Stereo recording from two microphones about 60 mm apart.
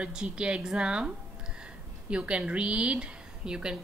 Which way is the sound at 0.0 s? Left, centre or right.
Centre.